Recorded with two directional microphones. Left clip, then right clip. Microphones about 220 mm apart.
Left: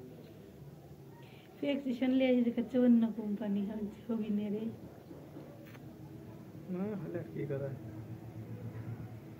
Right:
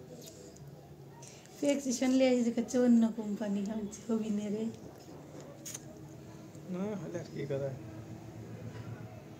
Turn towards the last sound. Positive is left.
turn(degrees=-15)  # may be behind; listen again after turning